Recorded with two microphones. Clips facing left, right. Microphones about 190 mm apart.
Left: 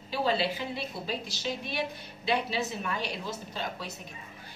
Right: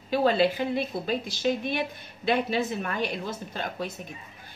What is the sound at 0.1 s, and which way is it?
A woman's voice, 55° right (ahead or behind).